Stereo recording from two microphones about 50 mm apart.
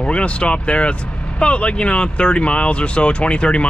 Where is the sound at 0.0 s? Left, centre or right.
Left.